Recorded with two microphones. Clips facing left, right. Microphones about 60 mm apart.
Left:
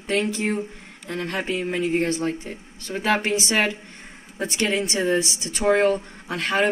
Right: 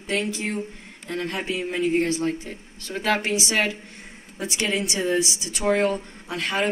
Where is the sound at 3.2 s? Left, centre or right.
Left.